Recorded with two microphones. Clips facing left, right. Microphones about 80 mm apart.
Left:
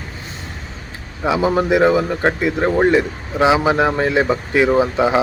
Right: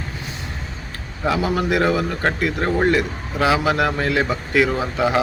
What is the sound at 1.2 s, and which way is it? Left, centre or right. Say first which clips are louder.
Speech: left 4 dB; centre.